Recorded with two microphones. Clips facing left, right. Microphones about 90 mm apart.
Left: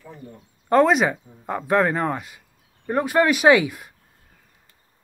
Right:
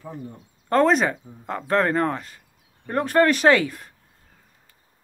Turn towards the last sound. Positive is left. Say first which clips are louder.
# left 2 dB
turn(degrees=10)  # may be behind; listen again after turning